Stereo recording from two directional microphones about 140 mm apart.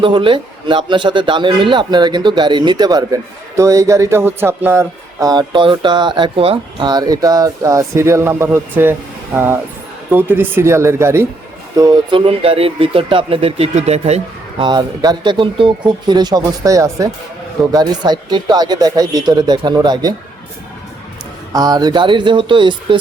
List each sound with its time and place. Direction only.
0.0 s a man's voice: 35° right (ahead or behind)
6.8 s speech: 30° right (ahead or behind)
12.1 s speech: 40° right (ahead or behind)
14.6 s a man's voice: 30° right (ahead or behind)
21.5 s a man's voice: 25° right (ahead or behind)